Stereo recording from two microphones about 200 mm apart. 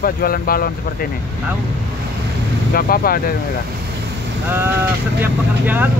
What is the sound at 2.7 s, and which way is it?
Speech, 45° left (ahead or behind).